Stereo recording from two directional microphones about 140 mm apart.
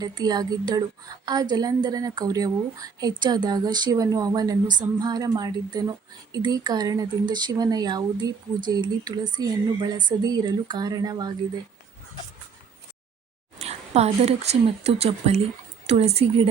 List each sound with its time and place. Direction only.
0.0 s a woman's voice: 30° right (ahead or behind)
13.6 s a woman's voice: 50° right (ahead or behind)